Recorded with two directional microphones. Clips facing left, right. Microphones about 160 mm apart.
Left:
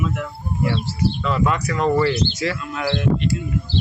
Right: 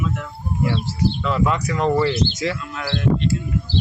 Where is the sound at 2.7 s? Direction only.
15° left (ahead or behind).